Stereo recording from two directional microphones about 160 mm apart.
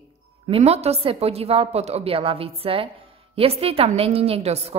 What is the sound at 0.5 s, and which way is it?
A woman's voice, 40° right (ahead or behind).